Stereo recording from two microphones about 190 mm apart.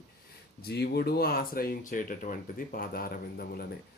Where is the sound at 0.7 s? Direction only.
55° left (ahead or behind).